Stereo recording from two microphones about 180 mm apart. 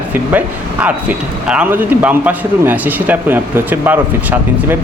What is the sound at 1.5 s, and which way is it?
A man's voice, 5° right (ahead or behind).